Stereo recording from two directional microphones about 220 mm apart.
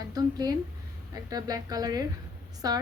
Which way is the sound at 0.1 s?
15° right (ahead or behind).